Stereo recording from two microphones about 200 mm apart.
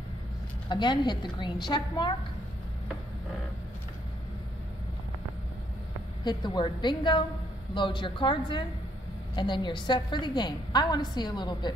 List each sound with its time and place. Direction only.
0.7 s a woman's voice: 20° left (ahead or behind)
6.2 s a woman's voice: 20° left (ahead or behind)